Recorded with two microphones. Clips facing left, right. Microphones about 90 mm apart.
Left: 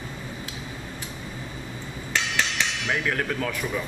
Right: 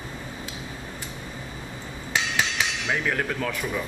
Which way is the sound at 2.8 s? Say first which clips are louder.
Even; centre (ahead or behind).